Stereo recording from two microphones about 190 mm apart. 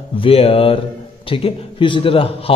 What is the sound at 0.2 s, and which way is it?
A man's voice, 30° left (ahead or behind).